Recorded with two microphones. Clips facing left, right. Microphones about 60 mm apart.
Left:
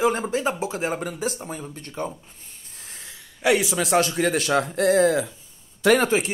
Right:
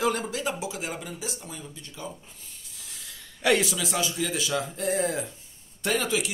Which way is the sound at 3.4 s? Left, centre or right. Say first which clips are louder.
Left 3 dB; centre.